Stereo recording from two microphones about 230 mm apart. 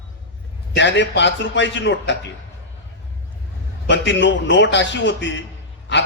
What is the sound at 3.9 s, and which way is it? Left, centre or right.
A man's voice, left.